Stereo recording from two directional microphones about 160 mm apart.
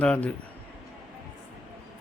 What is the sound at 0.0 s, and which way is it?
Speech, 5° left (ahead or behind).